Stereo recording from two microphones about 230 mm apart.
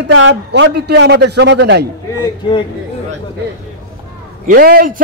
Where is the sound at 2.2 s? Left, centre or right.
Left.